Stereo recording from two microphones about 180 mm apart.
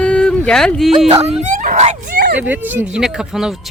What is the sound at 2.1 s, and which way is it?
Speech, 65° right (ahead or behind).